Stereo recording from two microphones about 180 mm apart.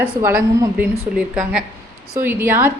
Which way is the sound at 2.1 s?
15° right (ahead or behind).